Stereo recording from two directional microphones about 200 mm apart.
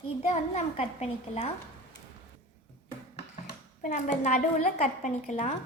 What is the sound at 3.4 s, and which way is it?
A woman's voice, 40° left (ahead or behind).